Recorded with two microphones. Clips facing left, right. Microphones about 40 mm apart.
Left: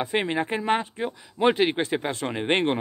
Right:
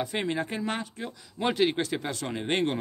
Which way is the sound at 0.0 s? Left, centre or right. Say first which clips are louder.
Left 4 dB; left.